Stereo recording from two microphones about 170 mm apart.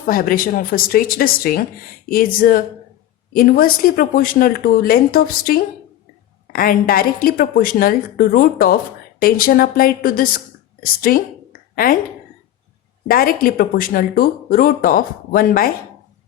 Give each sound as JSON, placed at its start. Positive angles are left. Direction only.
{"t": 0.0, "sound": "a woman's voice", "side_deg": 55}
{"t": 13.1, "sound": "a woman's voice", "side_deg": 60}